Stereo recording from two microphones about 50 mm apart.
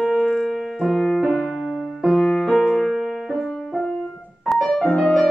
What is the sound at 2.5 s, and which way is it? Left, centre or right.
Music, centre.